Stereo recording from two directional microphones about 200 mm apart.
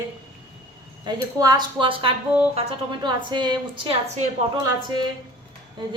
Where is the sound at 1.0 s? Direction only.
20° right (ahead or behind).